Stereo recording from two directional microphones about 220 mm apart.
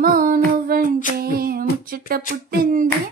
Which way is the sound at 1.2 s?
40° right (ahead or behind).